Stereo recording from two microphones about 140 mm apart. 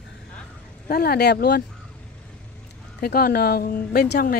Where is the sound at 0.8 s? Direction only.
90° left.